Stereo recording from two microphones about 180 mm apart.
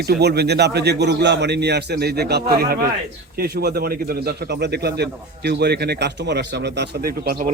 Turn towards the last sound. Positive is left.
turn(degrees=-55)  # may be behind; listen again after turning